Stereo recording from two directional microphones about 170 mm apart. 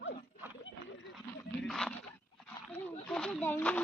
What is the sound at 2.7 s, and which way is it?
Speech, 10° left (ahead or behind).